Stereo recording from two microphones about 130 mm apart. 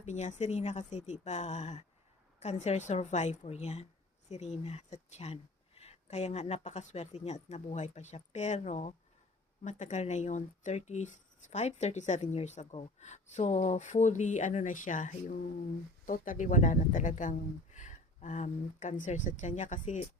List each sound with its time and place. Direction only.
0.0 s speech: 65° left (ahead or behind)